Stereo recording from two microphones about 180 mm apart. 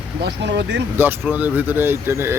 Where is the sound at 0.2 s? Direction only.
70° right (ahead or behind).